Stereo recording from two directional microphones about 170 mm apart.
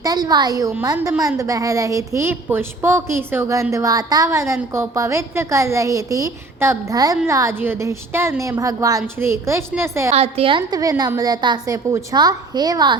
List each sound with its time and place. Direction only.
0.0 s a woman's voice: 25° right (ahead or behind)
10.1 s a woman's voice: 35° right (ahead or behind)